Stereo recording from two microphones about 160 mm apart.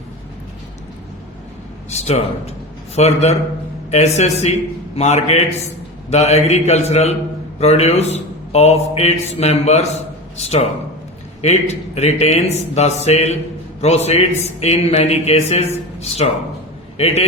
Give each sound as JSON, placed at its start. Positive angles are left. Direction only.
{"t": 1.9, "sound": "a man's voice", "side_deg": 40}